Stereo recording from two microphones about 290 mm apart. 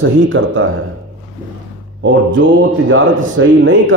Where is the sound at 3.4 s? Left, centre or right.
Right.